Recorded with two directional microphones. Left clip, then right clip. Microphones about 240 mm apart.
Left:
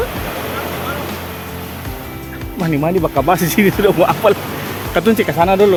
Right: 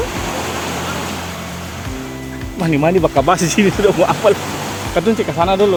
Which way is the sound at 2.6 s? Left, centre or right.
Centre.